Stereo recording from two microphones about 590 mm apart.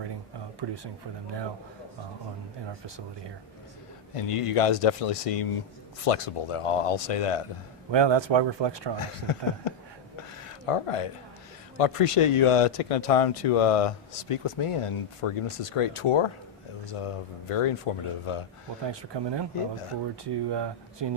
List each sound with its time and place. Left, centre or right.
0.6 s speech: right
4.1 s speech: left
7.9 s speech: right
9.0 s speech: left
10.2 s a sound: left
11.8 s speech: left
18.9 s speech: right